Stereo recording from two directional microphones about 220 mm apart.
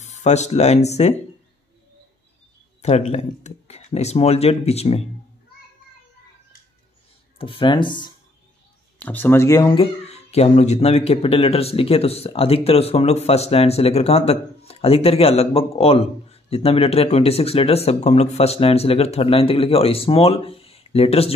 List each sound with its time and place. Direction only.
0.0 s speech: 30° left (ahead or behind)
2.8 s speech: 30° left (ahead or behind)
7.3 s speech: 25° left (ahead or behind)
9.0 s speech: 10° left (ahead or behind); by 21.4 s 25° left (ahead or behind)